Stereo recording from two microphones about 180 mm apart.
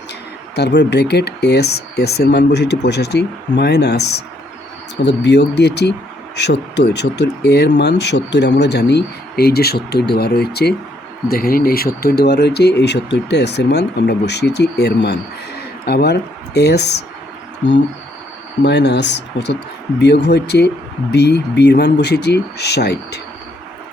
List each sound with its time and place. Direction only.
0.5 s speech: 70° left (ahead or behind)
17.6 s a sound: 80° left
18.6 s speech: 70° left (ahead or behind)